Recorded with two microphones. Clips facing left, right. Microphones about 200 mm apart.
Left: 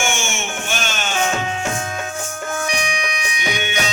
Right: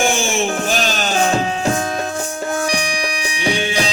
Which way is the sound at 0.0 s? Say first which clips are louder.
Right 6 dB; 35° right (ahead or behind).